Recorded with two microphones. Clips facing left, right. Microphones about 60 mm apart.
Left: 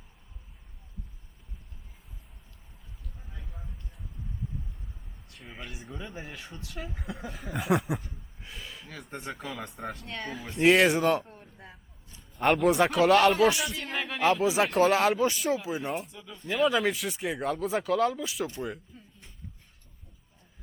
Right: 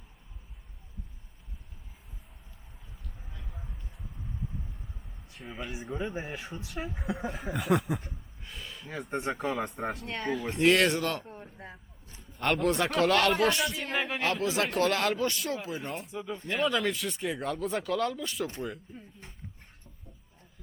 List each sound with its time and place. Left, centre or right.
5.3 s speech: centre
5.9 s speech: right
6.4 s speech: centre
7.3 s speech: centre
8.4 s a sound: centre
8.9 s speech: centre
10.6 s speech: centre
11.5 s vehicle: centre
12.4 s speech: centre
14.4 s speech: centre
16.1 s speech: right
16.5 s speech: centre